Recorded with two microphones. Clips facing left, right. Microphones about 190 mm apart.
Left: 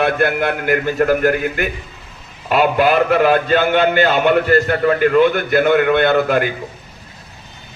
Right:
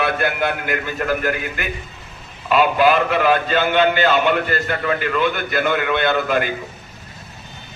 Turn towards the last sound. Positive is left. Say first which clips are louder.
# left 4 dB
turn(degrees=50)  # may be behind; listen again after turning